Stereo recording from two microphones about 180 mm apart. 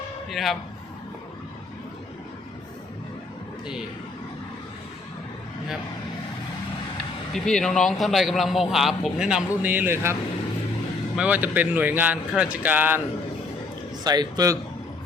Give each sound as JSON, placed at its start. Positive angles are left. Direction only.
{"t": 0.3, "sound": "a man's voice", "side_deg": 0}
{"t": 7.3, "sound": "a man's voice", "side_deg": 5}
{"t": 11.2, "sound": "a man's voice", "side_deg": -10}
{"t": 14.0, "sound": "a man's voice", "side_deg": -20}